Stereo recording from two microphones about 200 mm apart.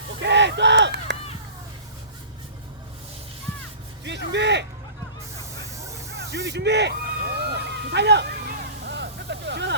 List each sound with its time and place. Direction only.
0.2 s honk: 60° right (ahead or behind)
4.0 s speech: 60° right (ahead or behind)
6.1 s a sound: 55° right (ahead or behind)